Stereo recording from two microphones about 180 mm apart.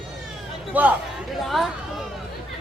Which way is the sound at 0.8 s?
10° right (ahead or behind).